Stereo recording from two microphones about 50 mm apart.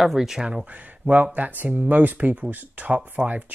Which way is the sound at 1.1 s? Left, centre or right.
Right.